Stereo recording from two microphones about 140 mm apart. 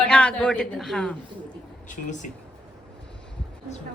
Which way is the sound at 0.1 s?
10° left (ahead or behind).